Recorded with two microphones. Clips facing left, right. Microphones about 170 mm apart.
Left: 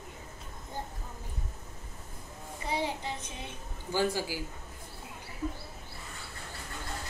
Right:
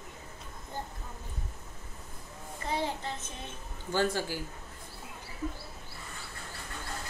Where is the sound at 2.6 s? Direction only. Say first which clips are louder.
Even; 10° left (ahead or behind).